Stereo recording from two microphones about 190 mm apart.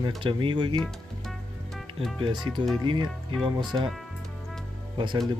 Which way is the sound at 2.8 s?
25° right (ahead or behind).